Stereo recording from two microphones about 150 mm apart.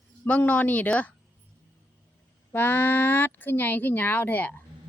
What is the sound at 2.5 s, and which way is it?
Speech, 15° left (ahead or behind).